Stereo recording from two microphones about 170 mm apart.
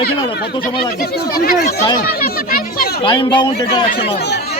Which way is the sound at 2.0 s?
60° left (ahead or behind).